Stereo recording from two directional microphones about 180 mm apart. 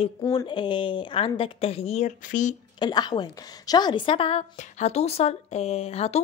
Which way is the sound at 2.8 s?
20° left (ahead or behind).